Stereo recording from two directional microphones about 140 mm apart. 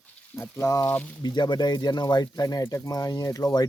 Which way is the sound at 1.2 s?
30° left (ahead or behind).